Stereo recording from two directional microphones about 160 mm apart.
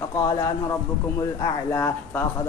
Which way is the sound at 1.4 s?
15° left (ahead or behind).